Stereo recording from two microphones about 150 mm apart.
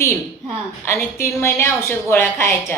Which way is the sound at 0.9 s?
15° left (ahead or behind).